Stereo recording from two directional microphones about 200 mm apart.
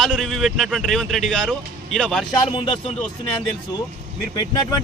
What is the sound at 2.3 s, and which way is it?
Speech, 25° left (ahead or behind).